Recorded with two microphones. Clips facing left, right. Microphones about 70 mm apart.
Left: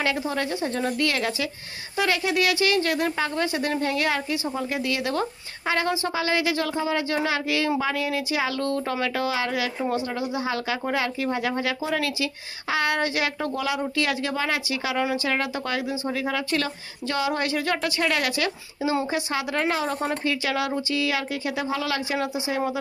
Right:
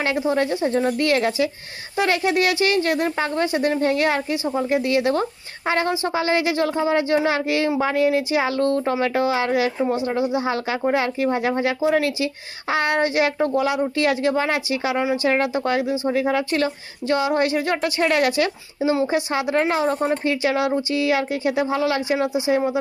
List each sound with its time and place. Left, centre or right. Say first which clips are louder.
0.2 s speech: right 6 dB; right